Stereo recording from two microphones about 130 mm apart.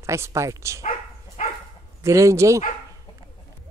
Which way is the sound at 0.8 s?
65° left (ahead or behind).